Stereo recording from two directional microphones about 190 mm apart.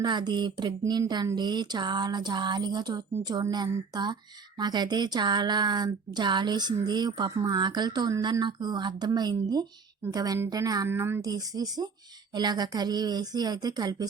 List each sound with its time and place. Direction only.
0.0 s speech: 25° right (ahead or behind)